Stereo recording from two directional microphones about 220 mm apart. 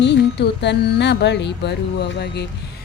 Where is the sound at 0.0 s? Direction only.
50° left (ahead or behind).